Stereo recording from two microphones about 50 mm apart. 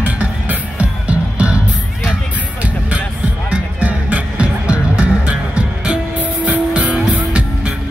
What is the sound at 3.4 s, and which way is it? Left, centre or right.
Music, right.